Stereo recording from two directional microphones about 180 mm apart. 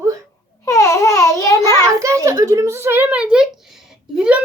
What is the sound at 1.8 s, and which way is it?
A child's voice, 15° right (ahead or behind).